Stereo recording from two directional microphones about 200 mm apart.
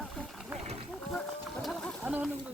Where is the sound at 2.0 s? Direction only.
5° right (ahead or behind).